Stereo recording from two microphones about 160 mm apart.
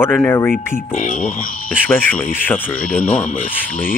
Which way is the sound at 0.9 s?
55° left (ahead or behind).